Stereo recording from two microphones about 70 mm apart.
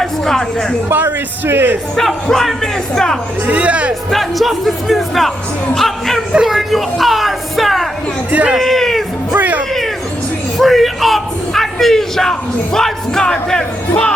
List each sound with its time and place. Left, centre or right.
0.0 s speech: centre
0.9 s a man's voice: right
2.2 s speech: centre
3.4 s speech: centre
4.1 s speech: centre
6.3 s a sound: centre
8.3 s speech: centre
8.5 s a sound: centre
9.4 s music: right
10.6 s bellow: centre